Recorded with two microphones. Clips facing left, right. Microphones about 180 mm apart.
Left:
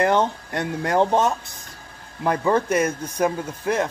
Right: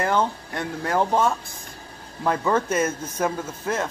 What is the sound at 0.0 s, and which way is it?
Speech, 20° left (ahead or behind).